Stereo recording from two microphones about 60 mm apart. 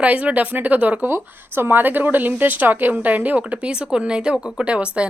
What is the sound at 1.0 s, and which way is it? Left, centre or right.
A woman's voice, right.